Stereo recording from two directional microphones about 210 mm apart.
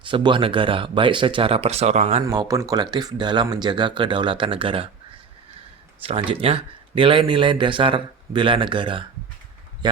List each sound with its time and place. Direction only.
0.0 s speech: 20° right (ahead or behind)
2.2 s speech: 20° right (ahead or behind)
6.0 s speech: 25° right (ahead or behind)